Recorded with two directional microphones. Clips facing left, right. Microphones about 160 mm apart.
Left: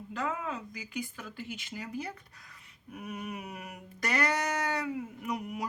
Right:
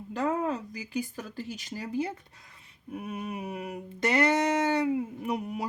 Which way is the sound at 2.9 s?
25° right (ahead or behind).